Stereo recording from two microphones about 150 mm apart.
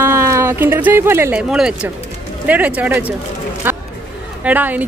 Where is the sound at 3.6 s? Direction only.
15° right (ahead or behind).